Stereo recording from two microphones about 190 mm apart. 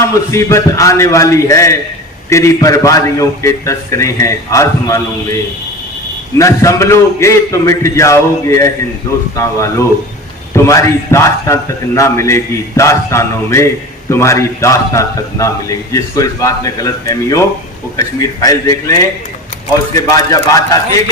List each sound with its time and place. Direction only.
0.0 s a man's voice: 15° left (ahead or behind)
6.4 s a man's voice: 15° left (ahead or behind)